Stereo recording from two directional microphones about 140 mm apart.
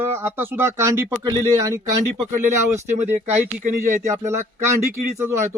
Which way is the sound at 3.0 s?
60° right (ahead or behind).